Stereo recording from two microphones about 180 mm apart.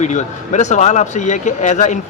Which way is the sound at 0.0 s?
40° left (ahead or behind).